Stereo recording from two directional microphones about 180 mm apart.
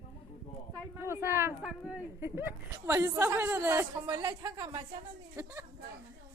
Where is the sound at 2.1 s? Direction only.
15° right (ahead or behind).